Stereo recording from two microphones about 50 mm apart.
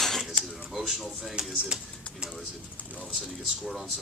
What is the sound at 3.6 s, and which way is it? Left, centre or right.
Speech, centre.